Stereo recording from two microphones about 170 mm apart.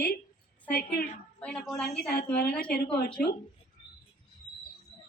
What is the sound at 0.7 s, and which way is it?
Speech, 60° left (ahead or behind).